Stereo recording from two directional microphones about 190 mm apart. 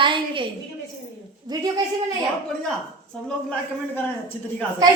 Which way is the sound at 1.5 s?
20° right (ahead or behind).